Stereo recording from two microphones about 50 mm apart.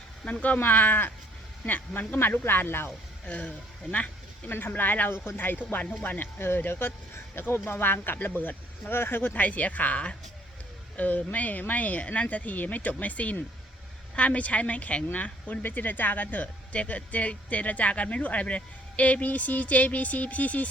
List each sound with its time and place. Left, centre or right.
0.4 s speech: left
2.1 s speech: left
3.9 s a sound: left
4.5 s speech: left
5.1 s speech: left
5.4 s speech: left
8.9 s speech: left